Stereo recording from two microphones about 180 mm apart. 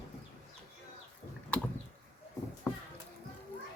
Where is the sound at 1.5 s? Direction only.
5° left (ahead or behind).